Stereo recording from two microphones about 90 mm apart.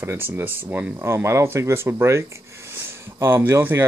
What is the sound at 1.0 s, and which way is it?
Speech, 30° right (ahead or behind).